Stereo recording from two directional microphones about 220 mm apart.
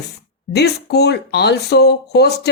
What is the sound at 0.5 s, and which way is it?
Speech, 50° left (ahead or behind).